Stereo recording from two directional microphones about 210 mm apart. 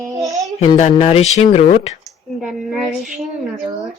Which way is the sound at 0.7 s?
30° left (ahead or behind).